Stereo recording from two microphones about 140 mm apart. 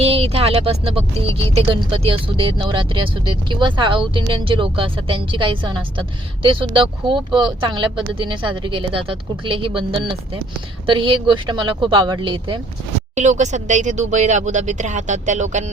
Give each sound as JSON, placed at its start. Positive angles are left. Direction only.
{"t": 0.0, "sound": "speech", "side_deg": -45}
{"t": 13.1, "sound": "speech", "side_deg": -55}